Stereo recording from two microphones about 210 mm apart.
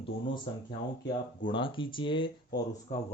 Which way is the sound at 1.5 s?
25° left (ahead or behind).